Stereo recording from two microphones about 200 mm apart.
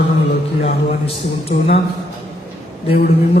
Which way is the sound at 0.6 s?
30° left (ahead or behind).